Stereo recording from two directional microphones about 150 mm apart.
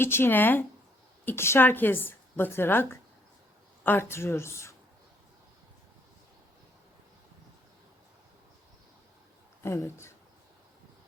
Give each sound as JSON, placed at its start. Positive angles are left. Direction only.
{"t": 0.0, "sound": "a woman's voice", "side_deg": 15}
{"t": 9.6, "sound": "a woman's voice", "side_deg": 15}